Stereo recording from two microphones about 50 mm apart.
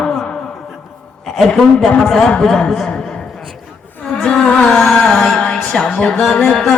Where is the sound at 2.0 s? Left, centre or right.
Centre.